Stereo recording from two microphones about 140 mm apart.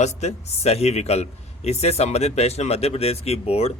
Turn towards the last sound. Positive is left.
turn(degrees=45)  # may be behind; listen again after turning